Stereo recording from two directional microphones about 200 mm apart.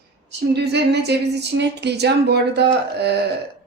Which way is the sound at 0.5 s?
55° right (ahead or behind).